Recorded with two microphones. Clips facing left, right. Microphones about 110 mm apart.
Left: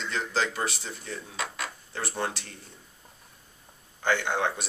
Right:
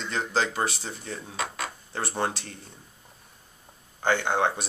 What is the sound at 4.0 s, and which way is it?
Speech, 30° right (ahead or behind).